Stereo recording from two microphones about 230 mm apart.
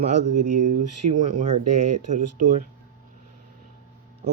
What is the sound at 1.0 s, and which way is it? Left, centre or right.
Speech, right.